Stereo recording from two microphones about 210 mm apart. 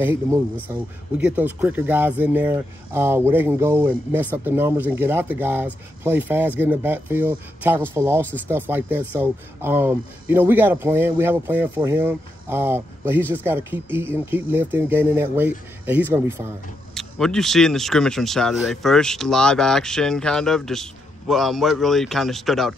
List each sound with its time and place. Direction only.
0.0 s speech: 10° right (ahead or behind)
16.9 s speech: centre (ahead or behind)